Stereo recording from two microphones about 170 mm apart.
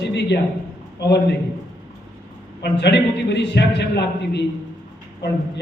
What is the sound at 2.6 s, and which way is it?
A man's voice, 90° left.